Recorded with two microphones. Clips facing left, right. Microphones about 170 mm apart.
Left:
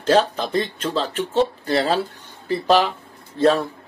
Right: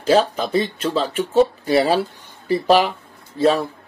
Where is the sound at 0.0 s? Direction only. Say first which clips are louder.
Right 1 dB; 10° right (ahead or behind).